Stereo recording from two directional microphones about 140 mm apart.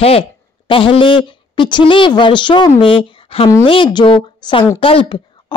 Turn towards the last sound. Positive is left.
turn(degrees=40)  # may be behind; listen again after turning